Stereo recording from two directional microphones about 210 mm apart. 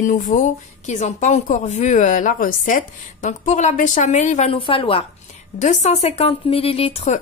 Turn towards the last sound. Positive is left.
turn(degrees=30)  # may be behind; listen again after turning